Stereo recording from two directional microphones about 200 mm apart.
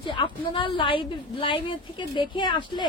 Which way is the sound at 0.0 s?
25° left (ahead or behind).